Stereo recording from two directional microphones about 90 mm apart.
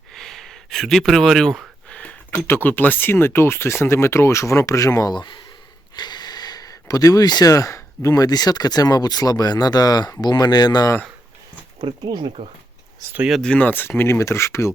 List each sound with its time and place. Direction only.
0.1 s a sound: 5° left (ahead or behind)
2.3 s speech: 25° left (ahead or behind)
5.1 s speech: 55° left (ahead or behind)
11.8 s speech: 60° right (ahead or behind)
13.4 s speech: 15° left (ahead or behind); by 14.7 s 30° left (ahead or behind)